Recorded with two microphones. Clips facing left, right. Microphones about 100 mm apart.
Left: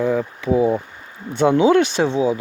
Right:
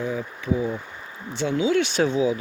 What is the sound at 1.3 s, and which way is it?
Speech, 60° left (ahead or behind).